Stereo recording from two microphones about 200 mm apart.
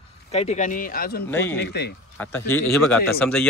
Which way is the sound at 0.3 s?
35° left (ahead or behind).